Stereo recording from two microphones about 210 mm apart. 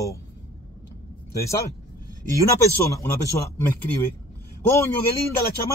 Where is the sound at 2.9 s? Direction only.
15° left (ahead or behind).